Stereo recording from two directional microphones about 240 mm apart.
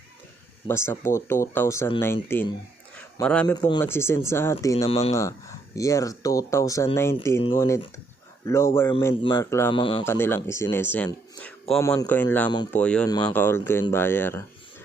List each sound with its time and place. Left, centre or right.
0.7 s speech: centre
2.9 s a sound: centre
3.5 s speech: centre
5.7 s speech: centre
9.7 s speech: left
10.0 s speech: centre